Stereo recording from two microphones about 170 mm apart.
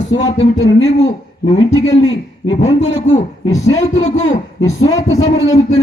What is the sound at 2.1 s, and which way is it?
Speech, 90° left.